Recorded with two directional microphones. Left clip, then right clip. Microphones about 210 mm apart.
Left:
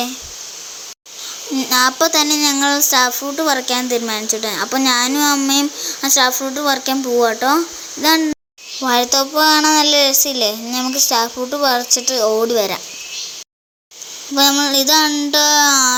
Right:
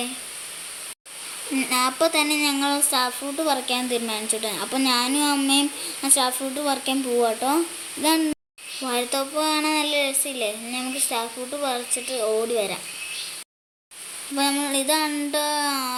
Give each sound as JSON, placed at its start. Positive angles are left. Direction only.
{"t": 1.5, "sound": "speech", "side_deg": 10}
{"t": 8.8, "sound": "a child's voice", "side_deg": 25}
{"t": 14.3, "sound": "a child's voice", "side_deg": 20}